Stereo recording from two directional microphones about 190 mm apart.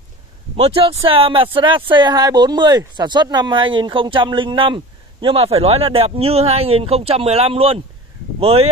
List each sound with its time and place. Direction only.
0.6 s speech: 30° right (ahead or behind)